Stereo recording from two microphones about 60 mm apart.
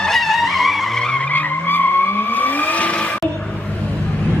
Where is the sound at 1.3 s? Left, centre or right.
Left.